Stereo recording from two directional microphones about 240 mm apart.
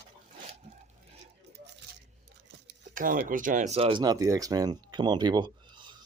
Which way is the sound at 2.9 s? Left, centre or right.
Right.